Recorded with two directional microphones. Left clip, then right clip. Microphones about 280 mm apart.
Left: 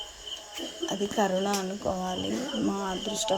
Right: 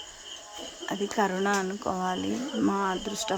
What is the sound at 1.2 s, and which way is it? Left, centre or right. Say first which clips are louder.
Speech: even; centre.